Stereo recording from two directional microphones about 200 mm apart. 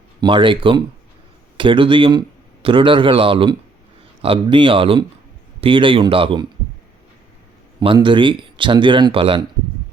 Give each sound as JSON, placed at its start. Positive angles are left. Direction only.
{"t": 0.2, "sound": "speech", "side_deg": -25}
{"t": 7.8, "sound": "speech", "side_deg": -20}